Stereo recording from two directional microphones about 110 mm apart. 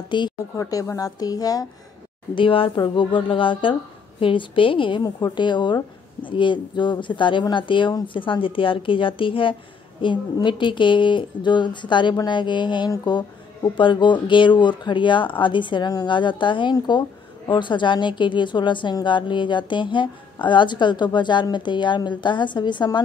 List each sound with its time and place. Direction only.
0.1 s a woman's voice: 45° left (ahead or behind)
0.6 s a woman's voice: 30° left (ahead or behind)
2.3 s a woman's voice: 55° left (ahead or behind)